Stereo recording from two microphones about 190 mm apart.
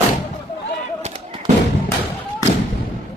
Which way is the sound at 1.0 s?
35° right (ahead or behind).